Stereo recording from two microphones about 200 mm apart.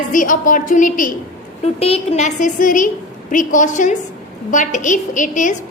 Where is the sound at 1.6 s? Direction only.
30° left (ahead or behind).